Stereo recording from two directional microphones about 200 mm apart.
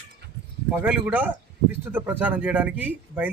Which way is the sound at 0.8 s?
10° right (ahead or behind).